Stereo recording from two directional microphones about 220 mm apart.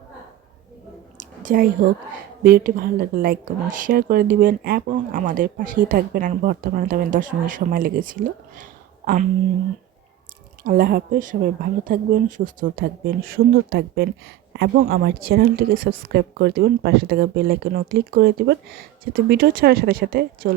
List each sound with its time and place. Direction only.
1.2 s a sound: 35° right (ahead or behind)
2.4 s a woman's voice: 40° right (ahead or behind)
10.6 s a woman's voice: 40° right (ahead or behind)